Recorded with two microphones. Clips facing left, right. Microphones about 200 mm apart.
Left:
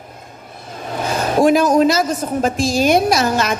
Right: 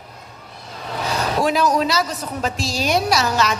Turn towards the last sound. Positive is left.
turn(degrees=50)  # may be behind; listen again after turning